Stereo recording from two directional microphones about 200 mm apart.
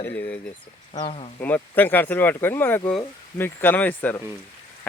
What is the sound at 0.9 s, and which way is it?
Speech, 30° left (ahead or behind).